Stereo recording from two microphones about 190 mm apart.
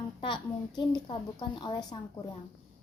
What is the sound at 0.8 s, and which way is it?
A woman's voice, 25° left (ahead or behind).